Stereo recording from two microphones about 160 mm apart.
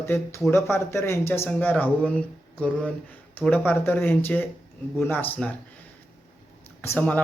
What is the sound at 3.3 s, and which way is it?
Speech, 10° left (ahead or behind).